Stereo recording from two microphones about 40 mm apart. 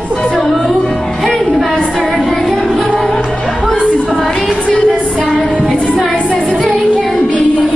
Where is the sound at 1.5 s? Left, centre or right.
Centre.